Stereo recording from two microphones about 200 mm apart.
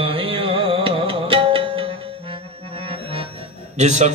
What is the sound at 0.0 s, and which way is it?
Music, 30° right (ahead or behind).